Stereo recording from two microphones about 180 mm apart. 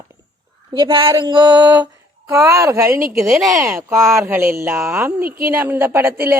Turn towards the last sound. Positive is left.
turn(degrees=-10)  # may be behind; listen again after turning